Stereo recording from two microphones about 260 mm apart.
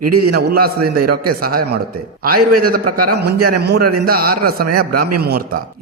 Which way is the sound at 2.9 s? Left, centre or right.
Right.